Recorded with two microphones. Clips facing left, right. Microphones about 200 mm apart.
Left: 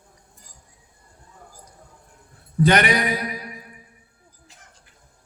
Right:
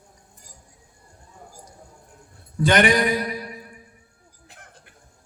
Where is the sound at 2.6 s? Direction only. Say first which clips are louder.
Right 1 dB; 45° right (ahead or behind).